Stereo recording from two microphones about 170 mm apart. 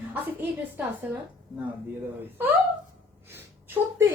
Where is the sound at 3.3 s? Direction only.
10° right (ahead or behind).